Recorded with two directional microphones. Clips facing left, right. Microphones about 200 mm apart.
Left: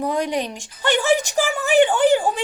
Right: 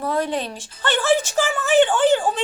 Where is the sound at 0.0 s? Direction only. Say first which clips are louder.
Left 1 dB; 15° left (ahead or behind).